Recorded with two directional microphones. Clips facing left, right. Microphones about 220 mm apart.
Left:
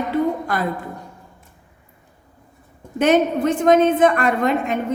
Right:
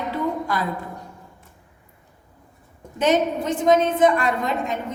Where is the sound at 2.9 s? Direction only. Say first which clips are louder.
Left 4 dB; 55° left (ahead or behind).